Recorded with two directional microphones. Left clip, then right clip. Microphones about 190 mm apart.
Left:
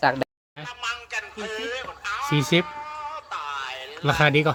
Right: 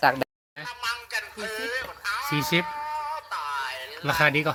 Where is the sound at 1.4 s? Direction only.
30° left (ahead or behind).